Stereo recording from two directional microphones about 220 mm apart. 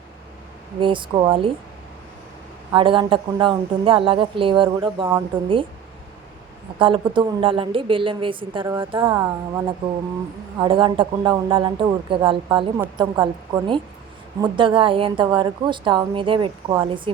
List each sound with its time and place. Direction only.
0.8 s speech: 20° right (ahead or behind)
2.7 s speech: 20° right (ahead or behind)
6.7 s speech: 25° right (ahead or behind)